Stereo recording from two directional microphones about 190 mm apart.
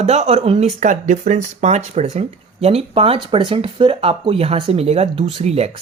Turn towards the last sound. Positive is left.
turn(degrees=-35)  # may be behind; listen again after turning